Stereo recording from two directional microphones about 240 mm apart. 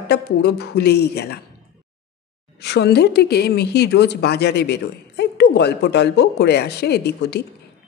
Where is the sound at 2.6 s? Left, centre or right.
Left.